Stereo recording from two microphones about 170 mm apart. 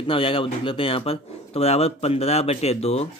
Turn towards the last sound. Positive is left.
turn(degrees=35)  # may be behind; listen again after turning